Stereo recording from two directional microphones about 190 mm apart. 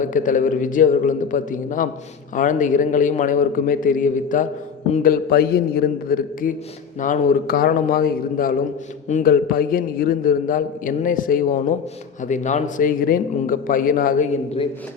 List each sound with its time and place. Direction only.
0.0 s a man's voice: 45° left (ahead or behind)